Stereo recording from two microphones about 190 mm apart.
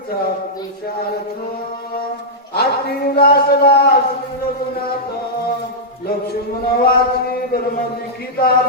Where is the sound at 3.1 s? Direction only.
55° left (ahead or behind).